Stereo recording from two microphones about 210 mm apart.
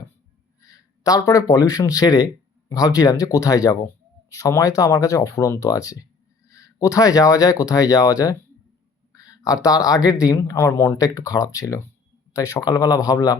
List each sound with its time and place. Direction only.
0.6 s speech: 15° left (ahead or behind)